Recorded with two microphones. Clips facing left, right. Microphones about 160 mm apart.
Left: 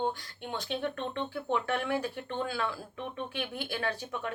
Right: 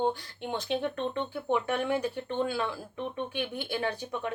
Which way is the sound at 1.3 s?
15° right (ahead or behind).